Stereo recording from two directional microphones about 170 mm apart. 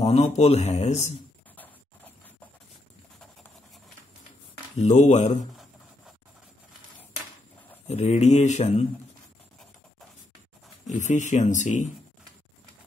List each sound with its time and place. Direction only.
0.0 s speech: 40° left (ahead or behind)
4.7 s speech: 45° left (ahead or behind)
7.8 s speech: 40° left (ahead or behind)
10.9 s speech: 45° left (ahead or behind)